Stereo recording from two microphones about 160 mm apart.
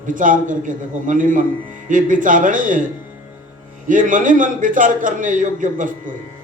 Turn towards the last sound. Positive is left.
turn(degrees=-55)  # may be behind; listen again after turning